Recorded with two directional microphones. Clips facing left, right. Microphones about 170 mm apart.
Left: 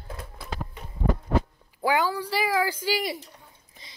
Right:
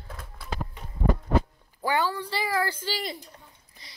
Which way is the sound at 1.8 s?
10° left (ahead or behind).